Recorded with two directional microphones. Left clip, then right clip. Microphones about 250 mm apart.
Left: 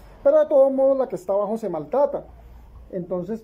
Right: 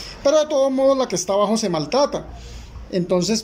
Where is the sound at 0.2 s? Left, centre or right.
Centre.